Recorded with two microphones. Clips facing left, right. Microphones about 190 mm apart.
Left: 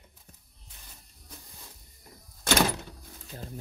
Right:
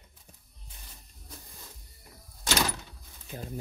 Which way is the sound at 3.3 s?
20° right (ahead or behind).